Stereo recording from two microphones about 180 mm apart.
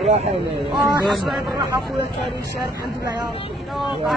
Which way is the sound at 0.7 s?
Centre (ahead or behind).